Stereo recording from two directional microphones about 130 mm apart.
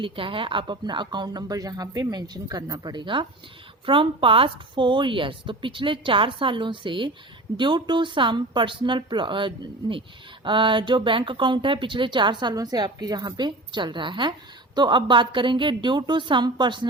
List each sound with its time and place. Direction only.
0.0 s speech: 40° right (ahead or behind)